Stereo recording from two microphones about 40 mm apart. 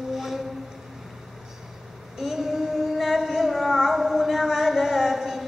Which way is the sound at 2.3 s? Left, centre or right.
Centre.